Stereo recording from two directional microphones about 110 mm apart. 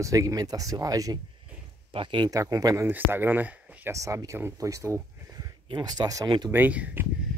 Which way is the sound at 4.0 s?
30° right (ahead or behind).